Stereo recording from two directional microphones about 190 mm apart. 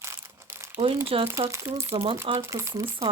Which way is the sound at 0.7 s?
30° right (ahead or behind).